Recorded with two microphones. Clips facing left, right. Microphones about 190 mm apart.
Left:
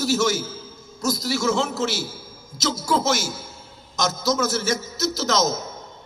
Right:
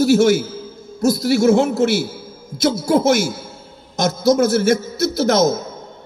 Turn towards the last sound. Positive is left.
turn(degrees=-55)  # may be behind; listen again after turning